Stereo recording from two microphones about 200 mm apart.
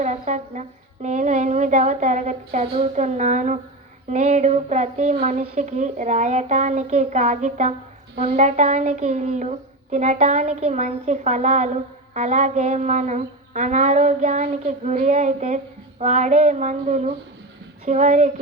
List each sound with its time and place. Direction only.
0.0 s music: 35° right (ahead or behind)
1.0 s a woman's voice: 35° right (ahead or behind)